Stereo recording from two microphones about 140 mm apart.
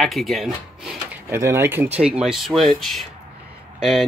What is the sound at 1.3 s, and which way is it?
Speech, 20° right (ahead or behind).